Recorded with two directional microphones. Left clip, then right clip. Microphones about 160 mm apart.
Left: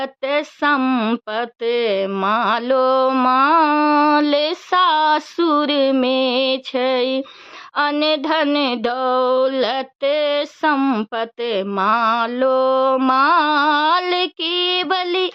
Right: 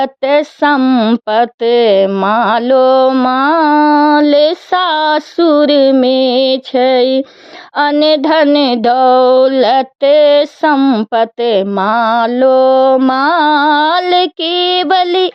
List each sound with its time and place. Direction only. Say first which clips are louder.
0.0 s speech: right 9 dB; 35° right (ahead or behind)
11.1 s speech: right 10 dB; 35° right (ahead or behind)